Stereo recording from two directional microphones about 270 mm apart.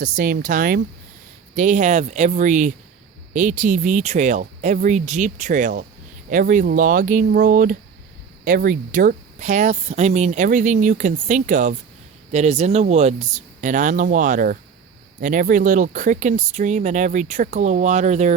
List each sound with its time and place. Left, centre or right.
0.0 s speech: right